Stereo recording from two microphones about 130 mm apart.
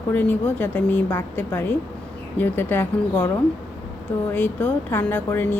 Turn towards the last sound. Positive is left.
turn(degrees=15)  # may be behind; listen again after turning